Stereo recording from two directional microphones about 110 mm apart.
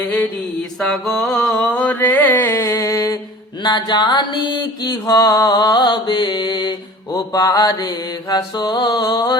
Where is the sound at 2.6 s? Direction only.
30° left (ahead or behind).